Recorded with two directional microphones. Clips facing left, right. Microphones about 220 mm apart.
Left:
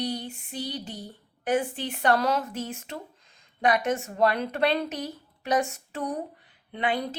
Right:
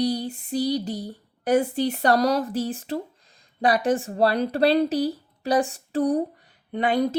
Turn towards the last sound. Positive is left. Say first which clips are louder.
# right 6 dB
turn(degrees=-40)  # may be behind; listen again after turning